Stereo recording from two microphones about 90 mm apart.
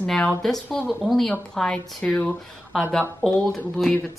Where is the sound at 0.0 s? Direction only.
10° left (ahead or behind).